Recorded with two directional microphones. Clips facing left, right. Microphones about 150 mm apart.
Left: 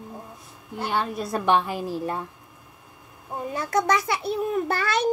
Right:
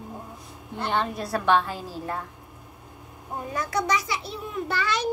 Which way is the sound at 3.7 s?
55° left (ahead or behind).